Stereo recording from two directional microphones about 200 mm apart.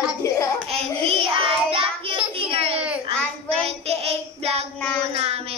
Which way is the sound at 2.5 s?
30° right (ahead or behind).